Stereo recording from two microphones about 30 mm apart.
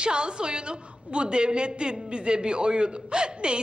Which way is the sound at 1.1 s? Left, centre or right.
Right.